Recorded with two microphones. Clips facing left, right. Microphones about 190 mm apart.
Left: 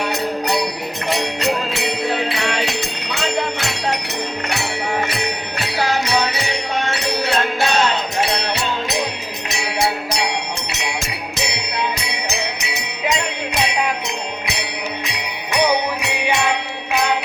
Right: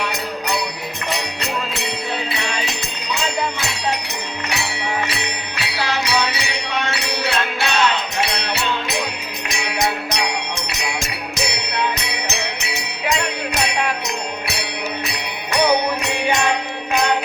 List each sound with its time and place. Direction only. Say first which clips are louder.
5.5 s music: left 3 dB; 50° left (ahead or behind)
9.7 s music: left 1 dB; 10° left (ahead or behind)
10.2 s music: left 1 dB; 25° left (ahead or behind)
13.1 s music: even; 25° left (ahead or behind)
15.5 s music: right 1 dB; 10° left (ahead or behind)